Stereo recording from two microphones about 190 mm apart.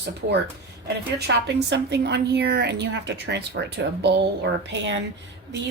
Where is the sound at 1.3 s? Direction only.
65° right (ahead or behind).